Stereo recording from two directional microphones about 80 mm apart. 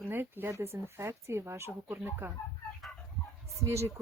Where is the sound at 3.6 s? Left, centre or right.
Right.